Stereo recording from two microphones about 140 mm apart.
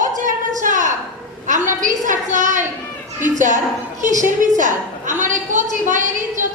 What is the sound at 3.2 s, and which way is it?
A woman's voice, 60° right (ahead or behind).